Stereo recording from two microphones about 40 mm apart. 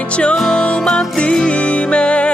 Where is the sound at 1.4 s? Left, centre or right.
Left.